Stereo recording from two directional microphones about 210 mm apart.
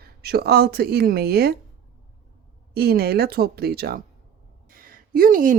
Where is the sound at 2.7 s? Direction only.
50° right (ahead or behind).